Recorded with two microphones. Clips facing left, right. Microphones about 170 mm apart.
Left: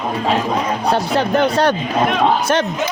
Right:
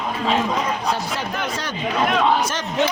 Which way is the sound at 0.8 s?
65° left (ahead or behind).